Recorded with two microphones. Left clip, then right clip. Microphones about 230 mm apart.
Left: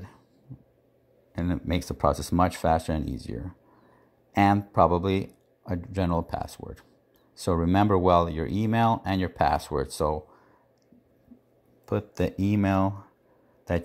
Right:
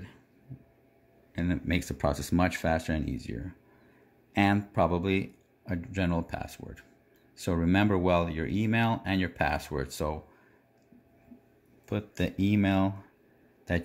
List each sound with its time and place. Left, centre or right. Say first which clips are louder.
1.3 s speech: left 1 dB; centre
11.8 s speech: left 5 dB; centre